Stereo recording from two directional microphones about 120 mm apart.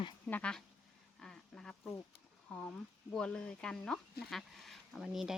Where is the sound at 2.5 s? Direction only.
10° left (ahead or behind).